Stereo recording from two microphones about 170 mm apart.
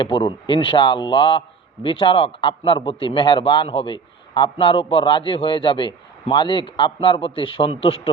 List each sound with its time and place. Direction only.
0.0 s a man's voice: 30° left (ahead or behind)